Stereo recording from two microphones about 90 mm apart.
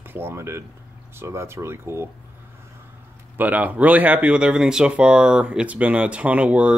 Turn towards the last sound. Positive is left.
turn(degrees=-15)  # may be behind; listen again after turning